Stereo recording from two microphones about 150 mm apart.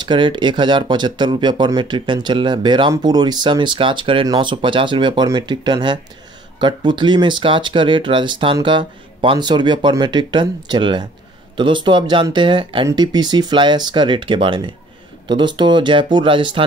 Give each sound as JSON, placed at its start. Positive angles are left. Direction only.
{"t": 0.0, "sound": "speech", "side_deg": -30}